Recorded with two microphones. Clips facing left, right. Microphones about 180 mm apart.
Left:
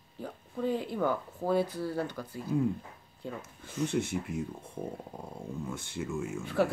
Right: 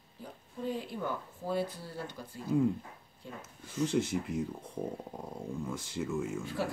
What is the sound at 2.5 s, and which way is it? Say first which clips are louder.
Speech: right 1 dB; centre (ahead or behind).